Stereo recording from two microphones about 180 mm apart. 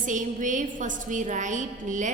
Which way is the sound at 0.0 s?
45° right (ahead or behind).